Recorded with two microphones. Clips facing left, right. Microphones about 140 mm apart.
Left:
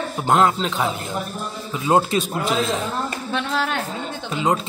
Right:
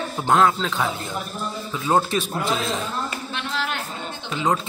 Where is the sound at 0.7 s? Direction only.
Centre (ahead or behind).